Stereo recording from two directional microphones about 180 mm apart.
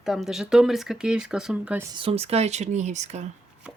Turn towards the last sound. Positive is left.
turn(degrees=-40)  # may be behind; listen again after turning